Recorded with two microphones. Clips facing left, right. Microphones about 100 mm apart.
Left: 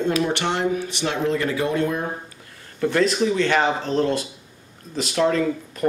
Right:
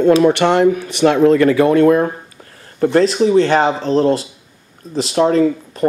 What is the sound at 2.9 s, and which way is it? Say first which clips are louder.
Speech: right 8 dB; 35° right (ahead or behind).